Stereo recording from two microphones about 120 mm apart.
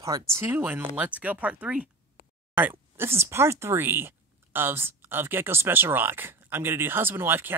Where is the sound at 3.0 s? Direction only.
20° right (ahead or behind).